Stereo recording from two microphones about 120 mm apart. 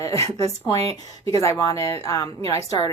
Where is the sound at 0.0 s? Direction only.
25° left (ahead or behind).